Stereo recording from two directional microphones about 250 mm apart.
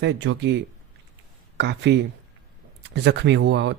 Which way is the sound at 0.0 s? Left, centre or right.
Right.